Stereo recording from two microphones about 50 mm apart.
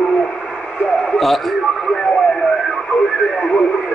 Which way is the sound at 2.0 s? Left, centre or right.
Centre.